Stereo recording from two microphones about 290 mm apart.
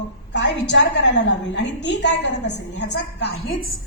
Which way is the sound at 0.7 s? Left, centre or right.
Left.